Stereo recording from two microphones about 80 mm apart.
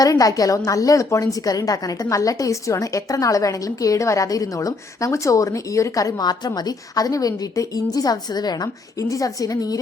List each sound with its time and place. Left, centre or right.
0.0 s a woman's voice: left
7.9 s a woman's voice: left
9.0 s a woman's voice: left